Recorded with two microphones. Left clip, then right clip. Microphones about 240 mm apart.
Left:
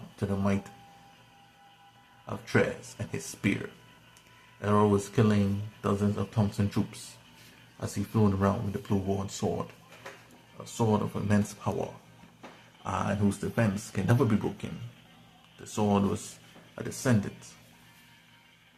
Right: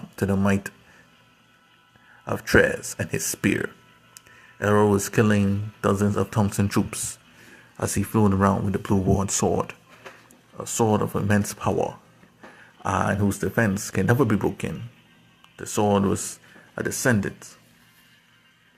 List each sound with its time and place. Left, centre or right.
0.3 s speech: right
2.2 s speech: right
4.6 s speech: right
10.6 s speech: right
12.8 s speech: right